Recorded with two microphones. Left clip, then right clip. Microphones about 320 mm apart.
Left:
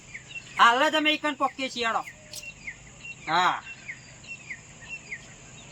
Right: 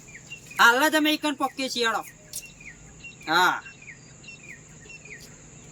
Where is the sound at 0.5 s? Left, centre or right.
Centre.